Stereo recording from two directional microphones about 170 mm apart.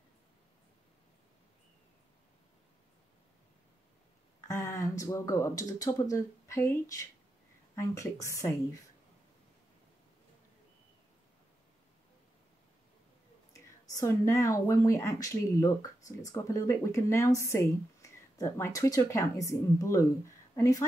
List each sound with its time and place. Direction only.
4.4 s speech: 15° left (ahead or behind)
13.5 s speech: 20° left (ahead or behind)